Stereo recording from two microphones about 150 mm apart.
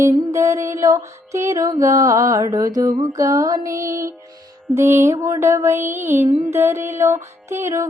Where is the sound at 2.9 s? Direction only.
60° right (ahead or behind).